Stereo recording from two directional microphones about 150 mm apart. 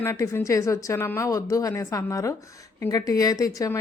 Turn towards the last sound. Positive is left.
turn(degrees=25)  # may be behind; listen again after turning